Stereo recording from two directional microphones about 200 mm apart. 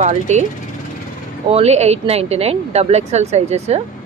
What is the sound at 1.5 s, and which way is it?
Speech, 30° right (ahead or behind).